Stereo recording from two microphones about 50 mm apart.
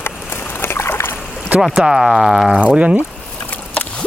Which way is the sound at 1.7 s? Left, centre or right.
Centre.